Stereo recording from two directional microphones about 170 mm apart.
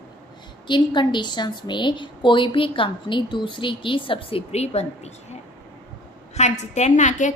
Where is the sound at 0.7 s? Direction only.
30° left (ahead or behind).